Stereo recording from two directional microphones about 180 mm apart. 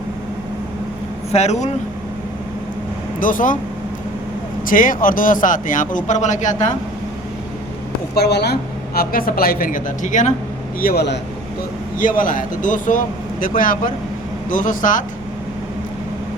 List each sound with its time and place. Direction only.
1.3 s speech: 40° left (ahead or behind)
3.2 s speech: 50° left (ahead or behind)
4.6 s speech: 50° left (ahead or behind)
8.1 s a woman's voice: 65° left (ahead or behind)
9.0 s speech: 55° left (ahead or behind)
10.8 s a woman's voice: 60° left (ahead or behind)
11.9 s speech: 50° left (ahead or behind)